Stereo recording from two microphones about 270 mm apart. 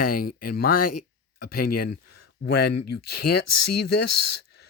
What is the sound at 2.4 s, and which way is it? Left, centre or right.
Speech, left.